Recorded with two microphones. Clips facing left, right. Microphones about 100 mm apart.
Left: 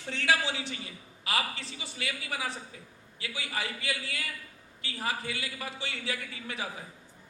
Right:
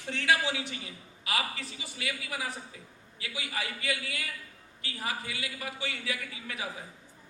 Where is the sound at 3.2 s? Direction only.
30° left (ahead or behind).